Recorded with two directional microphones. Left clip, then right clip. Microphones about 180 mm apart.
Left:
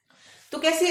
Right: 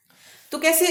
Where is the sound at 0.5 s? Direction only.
45° right (ahead or behind).